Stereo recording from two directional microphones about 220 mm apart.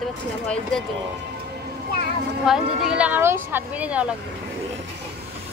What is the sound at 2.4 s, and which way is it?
Speech, 5° right (ahead or behind).